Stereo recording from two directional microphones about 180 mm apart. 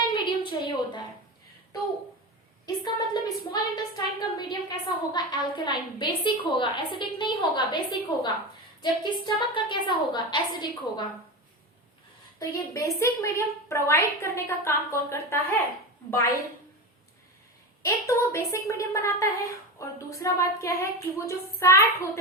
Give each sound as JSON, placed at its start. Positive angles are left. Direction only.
{"t": 0.3, "sound": "a sound", "side_deg": 25}
{"t": 2.8, "sound": "a woman's voice", "side_deg": 25}
{"t": 12.4, "sound": "a woman's voice", "side_deg": 15}
{"t": 17.8, "sound": "a woman's voice", "side_deg": 15}